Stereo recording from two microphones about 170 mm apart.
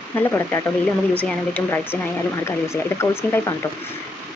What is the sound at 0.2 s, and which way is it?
A woman's voice, 15° left (ahead or behind).